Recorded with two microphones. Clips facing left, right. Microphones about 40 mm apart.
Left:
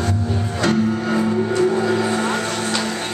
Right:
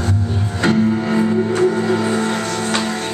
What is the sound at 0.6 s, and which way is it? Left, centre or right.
Music, centre.